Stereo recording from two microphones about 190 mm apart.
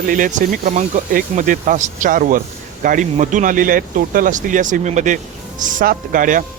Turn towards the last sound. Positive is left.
turn(degrees=-45)  # may be behind; listen again after turning